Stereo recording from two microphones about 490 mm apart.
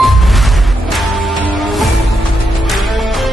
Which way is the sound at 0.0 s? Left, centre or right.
Centre.